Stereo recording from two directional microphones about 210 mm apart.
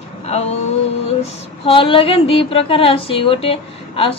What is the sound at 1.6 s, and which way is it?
A woman's voice, 25° left (ahead or behind).